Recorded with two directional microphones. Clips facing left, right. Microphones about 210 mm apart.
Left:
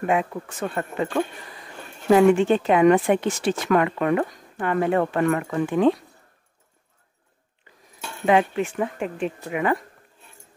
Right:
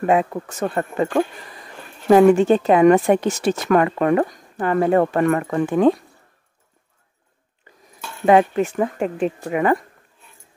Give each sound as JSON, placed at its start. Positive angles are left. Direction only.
{"t": 0.0, "sound": "a woman's voice", "side_deg": -40}
{"t": 8.3, "sound": "a woman's voice", "side_deg": -40}